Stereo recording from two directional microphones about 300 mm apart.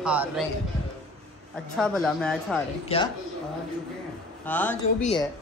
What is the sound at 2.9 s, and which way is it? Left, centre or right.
Speech, centre.